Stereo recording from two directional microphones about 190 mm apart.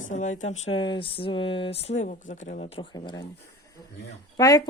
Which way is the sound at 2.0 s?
40° left (ahead or behind).